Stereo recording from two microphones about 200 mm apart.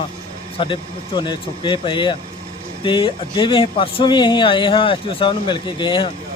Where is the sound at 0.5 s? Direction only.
25° left (ahead or behind).